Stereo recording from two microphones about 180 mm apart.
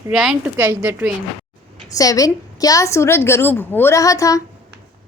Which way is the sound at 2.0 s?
20° left (ahead or behind).